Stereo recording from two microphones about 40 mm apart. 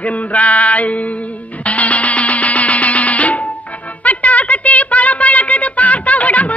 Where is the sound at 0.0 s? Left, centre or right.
Left.